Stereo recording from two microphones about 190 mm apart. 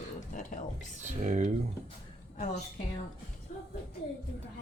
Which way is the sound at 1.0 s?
40° right (ahead or behind).